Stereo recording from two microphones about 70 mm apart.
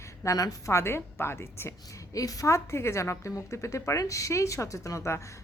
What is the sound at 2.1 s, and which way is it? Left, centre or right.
A woman's voice, left.